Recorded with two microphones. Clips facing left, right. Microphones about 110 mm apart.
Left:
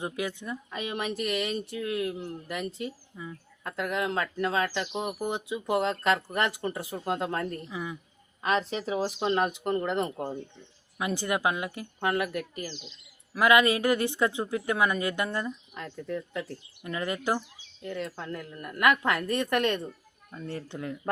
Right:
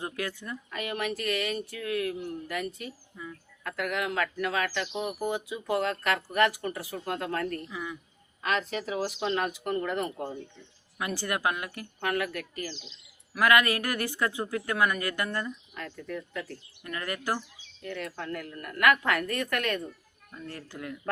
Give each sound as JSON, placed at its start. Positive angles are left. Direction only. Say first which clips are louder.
{"t": 0.0, "sound": "speech", "louder": "left 2 dB", "side_deg": 20}